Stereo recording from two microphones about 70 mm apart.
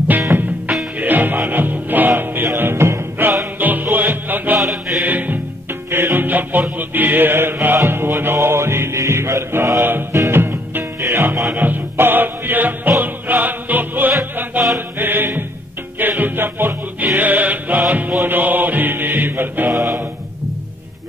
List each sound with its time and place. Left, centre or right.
0.3 s music: right
0.9 s music: right
19.7 s mantra: right